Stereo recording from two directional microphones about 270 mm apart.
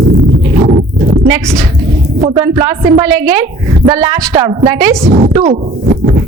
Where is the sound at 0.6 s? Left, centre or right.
Right.